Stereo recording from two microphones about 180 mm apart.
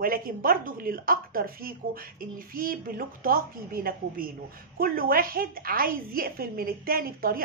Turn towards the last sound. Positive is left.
turn(degrees=-55)  # may be behind; listen again after turning